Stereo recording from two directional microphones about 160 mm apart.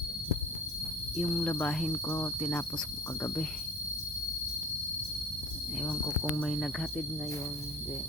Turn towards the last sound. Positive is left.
turn(degrees=5)  # may be behind; listen again after turning